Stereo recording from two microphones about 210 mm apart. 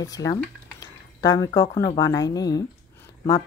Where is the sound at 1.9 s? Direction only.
15° left (ahead or behind).